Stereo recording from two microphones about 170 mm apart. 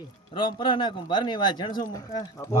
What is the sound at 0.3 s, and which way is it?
Speech, 30° left (ahead or behind).